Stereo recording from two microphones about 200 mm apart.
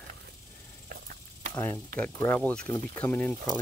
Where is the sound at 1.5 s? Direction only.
15° left (ahead or behind).